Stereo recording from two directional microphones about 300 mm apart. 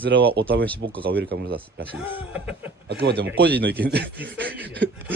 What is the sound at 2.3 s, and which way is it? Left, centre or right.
Speech, centre.